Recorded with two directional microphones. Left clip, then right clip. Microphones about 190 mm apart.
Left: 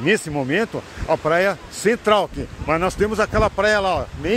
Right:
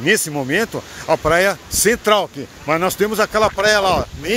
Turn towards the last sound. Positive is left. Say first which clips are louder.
# right 4 dB
turn(degrees=-15)  # may be behind; listen again after turning